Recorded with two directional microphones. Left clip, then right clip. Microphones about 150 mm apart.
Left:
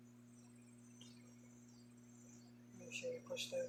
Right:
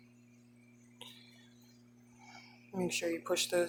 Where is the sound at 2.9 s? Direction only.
55° right (ahead or behind).